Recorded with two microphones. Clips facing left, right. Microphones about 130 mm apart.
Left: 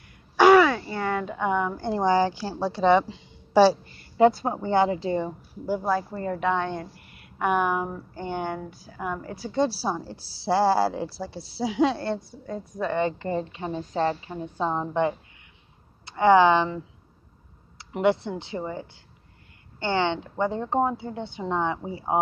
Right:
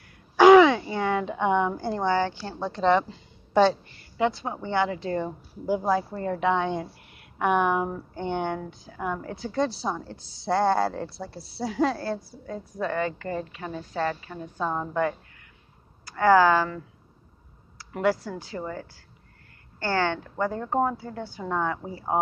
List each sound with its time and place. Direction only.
0.4 s a sound: 10° right (ahead or behind)
1.3 s a woman's voice: 5° right (ahead or behind)
2.0 s speech: 10° left (ahead or behind)
4.3 s a woman's voice: 45° left (ahead or behind)
5.7 s speech: 10° right (ahead or behind)
12.9 s a woman's voice: 25° left (ahead or behind)
16.1 s a woman's voice: 20° left (ahead or behind)